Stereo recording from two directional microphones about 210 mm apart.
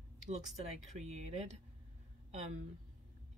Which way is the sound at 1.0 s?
30° right (ahead or behind).